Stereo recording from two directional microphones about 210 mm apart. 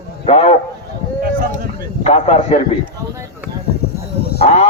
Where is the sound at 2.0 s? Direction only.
30° left (ahead or behind).